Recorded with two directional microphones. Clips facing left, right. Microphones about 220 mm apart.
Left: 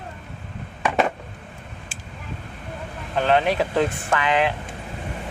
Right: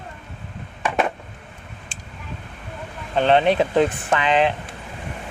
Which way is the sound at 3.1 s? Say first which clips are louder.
Right 3 dB; 25° right (ahead or behind).